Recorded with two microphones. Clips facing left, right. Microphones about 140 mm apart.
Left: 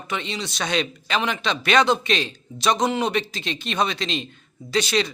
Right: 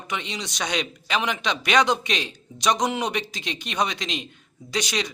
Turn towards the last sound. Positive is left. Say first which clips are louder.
# left 5 dB
turn(degrees=-15)  # may be behind; listen again after turning